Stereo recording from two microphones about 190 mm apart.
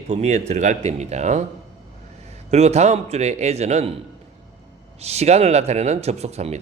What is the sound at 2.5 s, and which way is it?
Speech, 35° right (ahead or behind).